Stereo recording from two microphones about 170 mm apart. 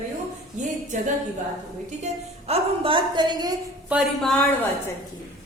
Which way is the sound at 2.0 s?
35° right (ahead or behind).